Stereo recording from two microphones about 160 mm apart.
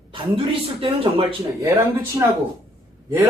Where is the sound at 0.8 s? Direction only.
35° right (ahead or behind).